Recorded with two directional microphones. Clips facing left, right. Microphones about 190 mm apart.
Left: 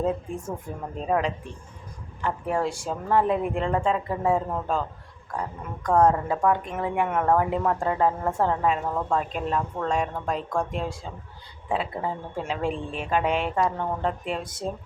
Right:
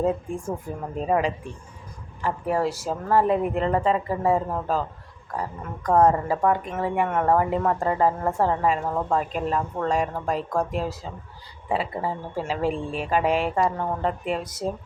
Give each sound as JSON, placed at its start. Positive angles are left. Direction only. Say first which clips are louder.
{"t": 0.9, "sound": "speech", "louder": "right 2 dB", "side_deg": -5}